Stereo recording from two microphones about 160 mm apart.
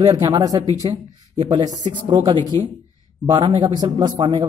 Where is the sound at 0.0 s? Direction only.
25° right (ahead or behind).